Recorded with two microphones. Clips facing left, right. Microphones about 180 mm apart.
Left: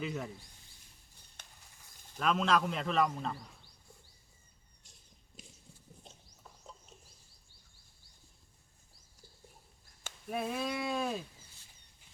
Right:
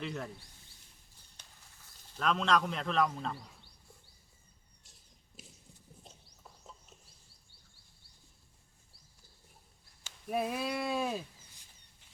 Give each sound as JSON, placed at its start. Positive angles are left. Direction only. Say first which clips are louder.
{"t": 0.0, "sound": "a man's voice", "louder": "left 1 dB", "side_deg": 5}
{"t": 1.4, "sound": "patter", "louder": "left 3 dB", "side_deg": 60}
{"t": 2.1, "sound": "a man's voice", "louder": "even", "side_deg": 5}
{"t": 5.3, "sound": "a sound", "louder": "even", "side_deg": -5}
{"t": 10.2, "sound": "a man's voice", "louder": "right 2 dB", "side_deg": -5}